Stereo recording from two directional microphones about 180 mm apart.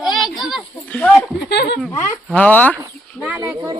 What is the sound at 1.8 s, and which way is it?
Speech, 10° left (ahead or behind).